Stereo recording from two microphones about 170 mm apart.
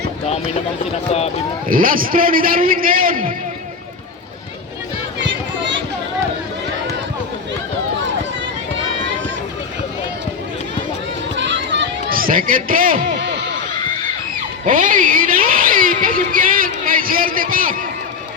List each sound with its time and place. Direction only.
1.7 s a man's voice: 55° right (ahead or behind)
5.2 s a sound: 90° right
11.3 s run: 90° right; by 13.0 s 55° right (ahead or behind)
13.1 s music: 90° right
14.6 s speech: 50° right (ahead or behind)